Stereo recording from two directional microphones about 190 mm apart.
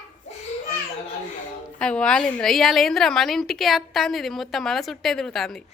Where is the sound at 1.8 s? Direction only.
5° left (ahead or behind).